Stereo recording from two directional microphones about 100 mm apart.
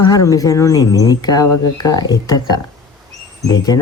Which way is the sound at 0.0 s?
40° left (ahead or behind).